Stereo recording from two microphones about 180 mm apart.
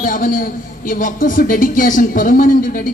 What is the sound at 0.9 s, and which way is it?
Speech, 50° left (ahead or behind).